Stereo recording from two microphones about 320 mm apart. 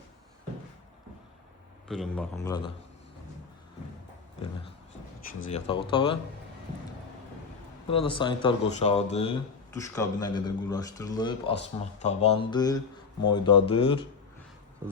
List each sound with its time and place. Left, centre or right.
1.9 s a man's voice: centre
5.5 s speech: centre
7.9 s speech: centre